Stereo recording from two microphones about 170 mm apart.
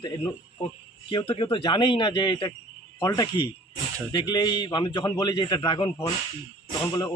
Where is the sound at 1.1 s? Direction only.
25° left (ahead or behind).